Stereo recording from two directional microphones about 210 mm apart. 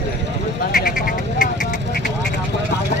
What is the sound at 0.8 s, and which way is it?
Frog, 40° left (ahead or behind).